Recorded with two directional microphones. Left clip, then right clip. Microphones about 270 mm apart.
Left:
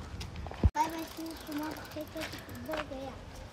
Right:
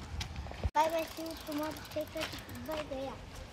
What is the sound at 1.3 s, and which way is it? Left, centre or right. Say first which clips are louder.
Speech: right 1 dB; right.